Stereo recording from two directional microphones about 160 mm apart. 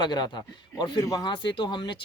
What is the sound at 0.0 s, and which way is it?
Speech, 25° left (ahead or behind).